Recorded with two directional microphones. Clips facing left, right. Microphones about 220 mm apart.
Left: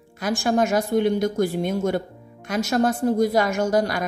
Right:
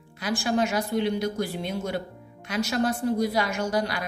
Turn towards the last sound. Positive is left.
turn(degrees=45)  # may be behind; listen again after turning